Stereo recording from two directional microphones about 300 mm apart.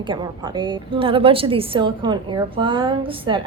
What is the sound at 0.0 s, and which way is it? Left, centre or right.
A woman's voice, centre.